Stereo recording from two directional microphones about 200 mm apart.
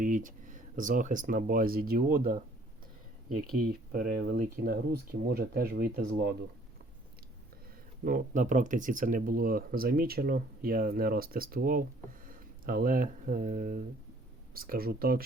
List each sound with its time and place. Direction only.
0.0 s speech: 40° right (ahead or behind)
3.6 s speech: 45° right (ahead or behind)
8.0 s speech: 40° right (ahead or behind)